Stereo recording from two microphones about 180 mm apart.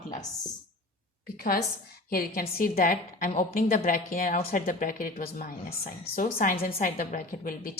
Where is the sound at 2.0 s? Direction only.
55° left (ahead or behind).